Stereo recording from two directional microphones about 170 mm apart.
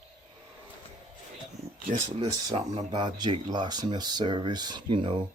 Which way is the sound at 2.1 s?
30° right (ahead or behind).